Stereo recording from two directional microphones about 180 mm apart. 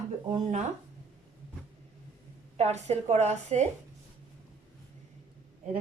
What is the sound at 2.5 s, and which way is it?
A woman's voice, 40° right (ahead or behind).